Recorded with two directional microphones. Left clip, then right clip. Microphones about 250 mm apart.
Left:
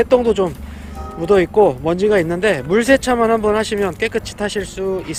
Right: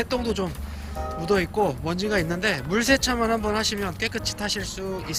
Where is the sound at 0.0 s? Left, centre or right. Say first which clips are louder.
Left 13 dB; centre.